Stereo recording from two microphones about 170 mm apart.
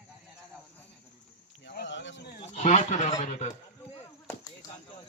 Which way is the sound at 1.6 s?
90° left.